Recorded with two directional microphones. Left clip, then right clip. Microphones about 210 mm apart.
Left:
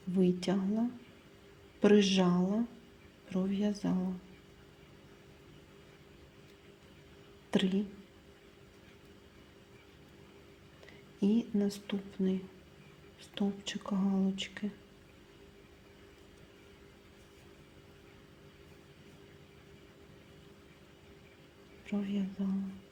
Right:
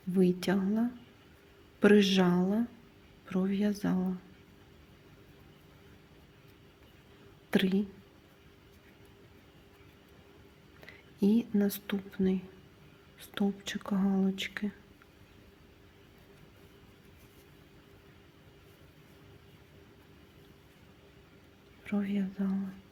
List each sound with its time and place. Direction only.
0.2 s speech: 20° right (ahead or behind)
7.5 s speech: 20° right (ahead or behind)
11.2 s speech: 20° right (ahead or behind)
21.8 s speech: 20° right (ahead or behind)